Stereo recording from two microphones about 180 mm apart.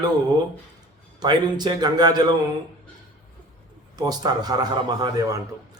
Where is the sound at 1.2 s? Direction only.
25° right (ahead or behind).